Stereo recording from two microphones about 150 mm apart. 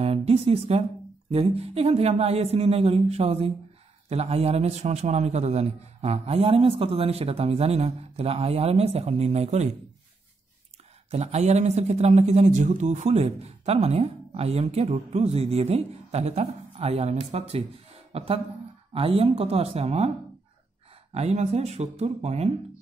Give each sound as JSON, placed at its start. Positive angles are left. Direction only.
{"t": 0.0, "sound": "a woman's voice", "side_deg": -40}
{"t": 11.1, "sound": "speech", "side_deg": -45}
{"t": 21.1, "sound": "speech", "side_deg": -45}